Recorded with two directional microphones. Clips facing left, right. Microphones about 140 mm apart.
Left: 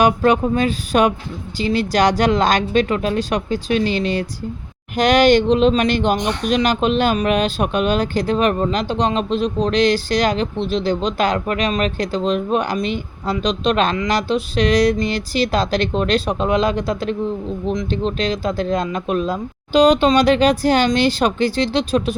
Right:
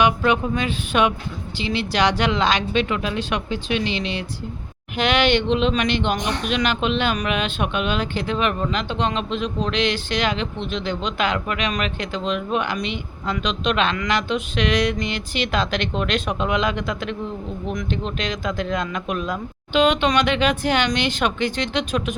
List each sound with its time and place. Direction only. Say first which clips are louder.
0.0 s speech: left 4 dB; 40° left (ahead or behind)